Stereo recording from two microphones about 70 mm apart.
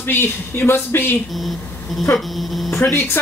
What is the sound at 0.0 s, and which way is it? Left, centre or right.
Speech, left.